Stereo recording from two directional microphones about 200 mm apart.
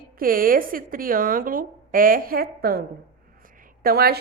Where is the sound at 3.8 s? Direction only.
50° right (ahead or behind).